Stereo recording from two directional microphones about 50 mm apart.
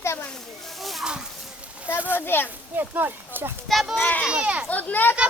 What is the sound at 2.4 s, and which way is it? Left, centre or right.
Speech, right.